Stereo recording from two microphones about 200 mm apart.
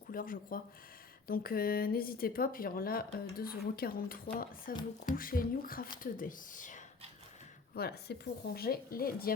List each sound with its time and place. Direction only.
0.1 s speech: 45° left (ahead or behind)
7.8 s speech: 55° left (ahead or behind)